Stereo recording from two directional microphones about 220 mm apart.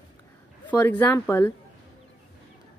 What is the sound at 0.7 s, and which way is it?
Speech, 5° left (ahead or behind).